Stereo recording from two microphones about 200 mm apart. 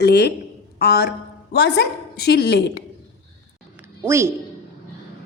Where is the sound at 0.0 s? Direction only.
55° left (ahead or behind).